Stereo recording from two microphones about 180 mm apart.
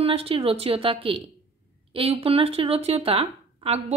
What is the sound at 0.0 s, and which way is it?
Speech, 30° right (ahead or behind).